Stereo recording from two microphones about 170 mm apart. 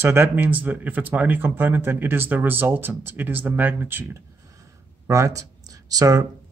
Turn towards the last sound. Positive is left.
turn(degrees=-20)  # may be behind; listen again after turning